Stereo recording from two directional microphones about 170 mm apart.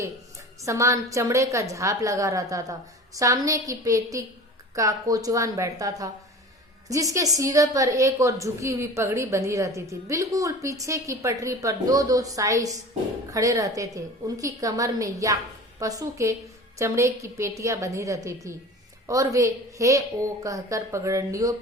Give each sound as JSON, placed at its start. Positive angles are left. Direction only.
{"t": 0.6, "sound": "a woman's voice", "side_deg": -15}